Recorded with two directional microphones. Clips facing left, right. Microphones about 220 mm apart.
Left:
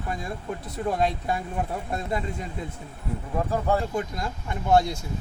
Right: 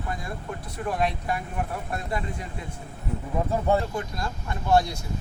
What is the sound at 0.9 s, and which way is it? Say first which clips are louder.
Speech: left 2 dB; 25° left (ahead or behind).